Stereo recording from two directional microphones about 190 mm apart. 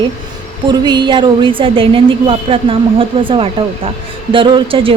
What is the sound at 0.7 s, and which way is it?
A woman's voice, 25° right (ahead or behind).